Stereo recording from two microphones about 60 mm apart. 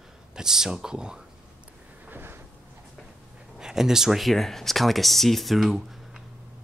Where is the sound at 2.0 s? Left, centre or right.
Right.